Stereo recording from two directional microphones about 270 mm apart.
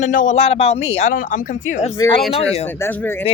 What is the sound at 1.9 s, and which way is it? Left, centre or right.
Speech, centre.